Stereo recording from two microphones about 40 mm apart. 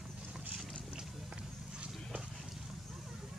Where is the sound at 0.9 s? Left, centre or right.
Right.